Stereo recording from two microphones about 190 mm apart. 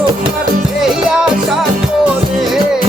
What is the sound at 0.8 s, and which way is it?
Music, 5° right (ahead or behind).